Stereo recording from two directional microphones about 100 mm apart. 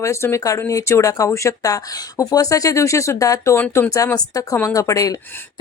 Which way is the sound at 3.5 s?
20° left (ahead or behind).